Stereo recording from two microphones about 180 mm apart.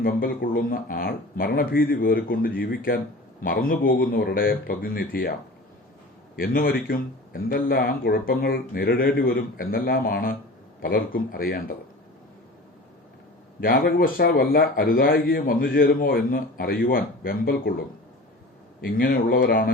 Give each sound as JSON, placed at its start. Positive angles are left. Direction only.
{"t": 0.0, "sound": "speech", "side_deg": 50}
{"t": 6.3, "sound": "a man's voice", "side_deg": 55}
{"t": 13.6, "sound": "a man's voice", "side_deg": 55}